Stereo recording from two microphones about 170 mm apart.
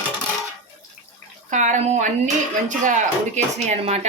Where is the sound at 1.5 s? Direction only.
45° right (ahead or behind).